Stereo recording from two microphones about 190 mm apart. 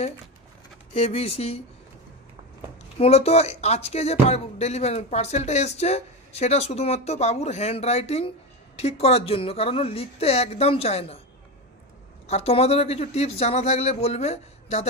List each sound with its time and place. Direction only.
0.9 s speech: 35° left (ahead or behind)
3.0 s speech: 35° left (ahead or behind)
12.3 s speech: 35° left (ahead or behind)